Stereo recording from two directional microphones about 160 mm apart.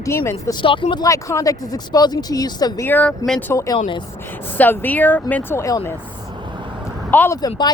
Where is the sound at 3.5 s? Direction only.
20° left (ahead or behind).